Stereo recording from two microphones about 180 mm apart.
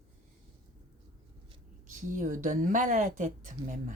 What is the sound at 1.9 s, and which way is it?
Speech, 45° right (ahead or behind).